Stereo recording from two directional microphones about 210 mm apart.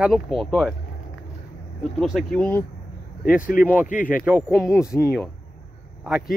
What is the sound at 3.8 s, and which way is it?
Speech, 40° left (ahead or behind).